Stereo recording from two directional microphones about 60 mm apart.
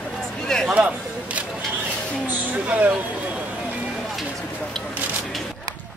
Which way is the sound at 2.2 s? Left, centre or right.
Right.